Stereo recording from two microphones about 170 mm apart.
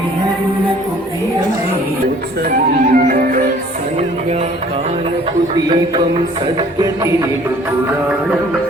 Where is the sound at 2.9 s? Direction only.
55° right (ahead or behind).